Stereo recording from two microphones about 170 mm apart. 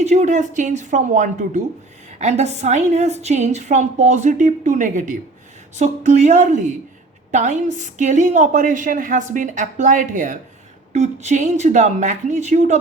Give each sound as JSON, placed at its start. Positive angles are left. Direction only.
{"t": 0.0, "sound": "a woman's voice", "side_deg": -40}